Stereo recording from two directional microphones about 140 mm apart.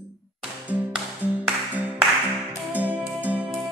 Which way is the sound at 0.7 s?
10° right (ahead or behind).